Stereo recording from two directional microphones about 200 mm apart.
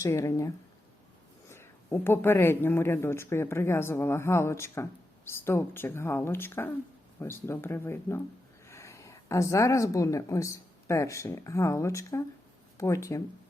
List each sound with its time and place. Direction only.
0.0 s speech: 15° left (ahead or behind)